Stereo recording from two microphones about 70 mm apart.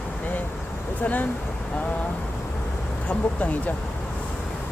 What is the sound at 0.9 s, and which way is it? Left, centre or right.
Speech, left.